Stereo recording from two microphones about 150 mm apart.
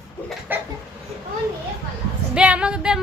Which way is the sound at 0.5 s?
15° right (ahead or behind).